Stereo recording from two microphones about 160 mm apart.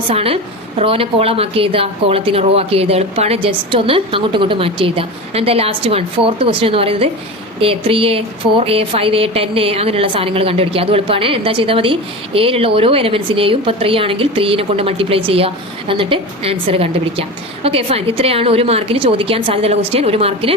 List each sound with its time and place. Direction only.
0.1 s a woman's voice: 35° right (ahead or behind)